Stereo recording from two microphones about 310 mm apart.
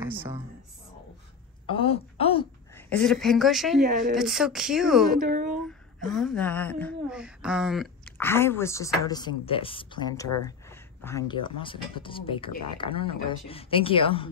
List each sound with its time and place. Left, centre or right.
0.0 s a sound: centre
1.7 s a sound: centre
2.7 s speech: centre
5.2 s speech: right
5.7 s speech: centre
12.4 s speech: left
12.7 s speech: centre